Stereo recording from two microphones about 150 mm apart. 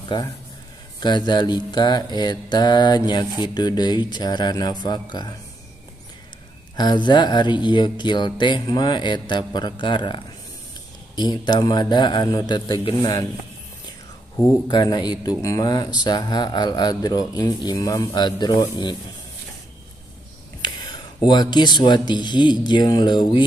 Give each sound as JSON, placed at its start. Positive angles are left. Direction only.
{"t": 1.0, "sound": "speech", "side_deg": 30}
{"t": 6.8, "sound": "speech", "side_deg": 30}
{"t": 14.7, "sound": "speech", "side_deg": 30}
{"t": 20.9, "sound": "speech", "side_deg": 30}